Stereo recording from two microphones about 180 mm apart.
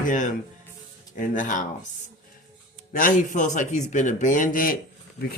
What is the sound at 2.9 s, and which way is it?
Speech, 45° left (ahead or behind).